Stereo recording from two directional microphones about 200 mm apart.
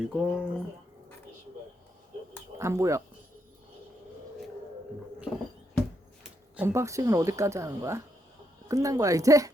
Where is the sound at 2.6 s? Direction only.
15° right (ahead or behind).